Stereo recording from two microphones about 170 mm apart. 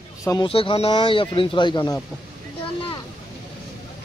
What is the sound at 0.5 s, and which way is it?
Speech, 35° left (ahead or behind).